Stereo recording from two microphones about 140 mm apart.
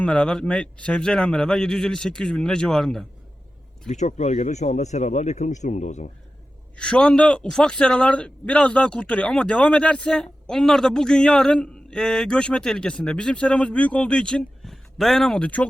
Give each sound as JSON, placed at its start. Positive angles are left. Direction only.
{"t": 0.0, "sound": "speech", "side_deg": 5}
{"t": 3.8, "sound": "speech", "side_deg": 60}
{"t": 6.7, "sound": "a man's voice", "side_deg": 5}